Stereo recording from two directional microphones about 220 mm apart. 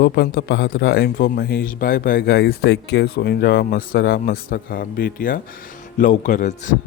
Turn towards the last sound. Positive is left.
turn(degrees=35)  # may be behind; listen again after turning